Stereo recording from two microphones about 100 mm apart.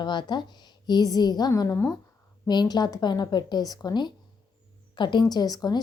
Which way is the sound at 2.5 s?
45° left (ahead or behind).